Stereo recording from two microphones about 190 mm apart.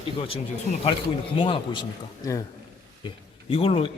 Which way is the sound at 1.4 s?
30° left (ahead or behind).